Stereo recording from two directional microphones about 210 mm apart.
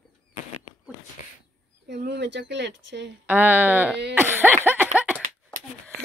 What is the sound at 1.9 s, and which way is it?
Speech, 55° right (ahead or behind).